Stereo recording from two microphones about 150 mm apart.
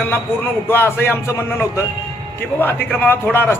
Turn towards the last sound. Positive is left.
turn(degrees=15)  # may be behind; listen again after turning